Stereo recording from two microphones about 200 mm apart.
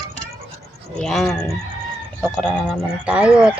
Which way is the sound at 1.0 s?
5° left (ahead or behind).